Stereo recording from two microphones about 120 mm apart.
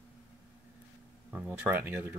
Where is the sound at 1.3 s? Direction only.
15° right (ahead or behind).